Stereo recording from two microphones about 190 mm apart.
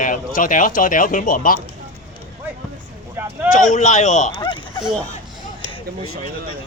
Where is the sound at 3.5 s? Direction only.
40° left (ahead or behind).